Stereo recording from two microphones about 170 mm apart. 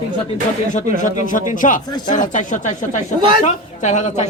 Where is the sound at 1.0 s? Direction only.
50° left (ahead or behind).